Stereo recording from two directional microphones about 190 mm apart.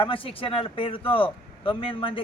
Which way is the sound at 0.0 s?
30° left (ahead or behind).